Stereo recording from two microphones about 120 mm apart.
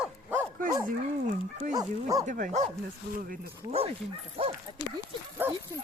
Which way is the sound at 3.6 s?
35° right (ahead or behind).